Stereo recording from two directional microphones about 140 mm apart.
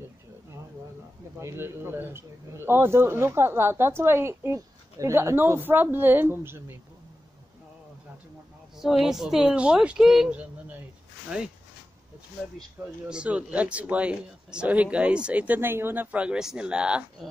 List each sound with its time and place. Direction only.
1.4 s a man's voice: 15° right (ahead or behind)
8.7 s a man's voice: 5° right (ahead or behind)
12.8 s a man's voice: 15° right (ahead or behind)